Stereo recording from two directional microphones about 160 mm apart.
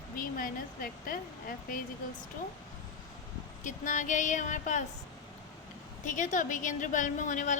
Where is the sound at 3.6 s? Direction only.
55° left (ahead or behind).